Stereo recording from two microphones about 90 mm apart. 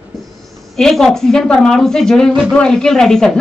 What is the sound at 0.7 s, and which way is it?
A woman's voice, 5° left (ahead or behind).